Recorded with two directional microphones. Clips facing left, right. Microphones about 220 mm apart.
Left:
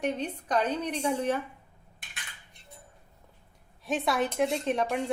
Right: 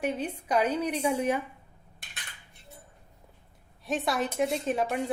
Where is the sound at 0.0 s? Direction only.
5° right (ahead or behind).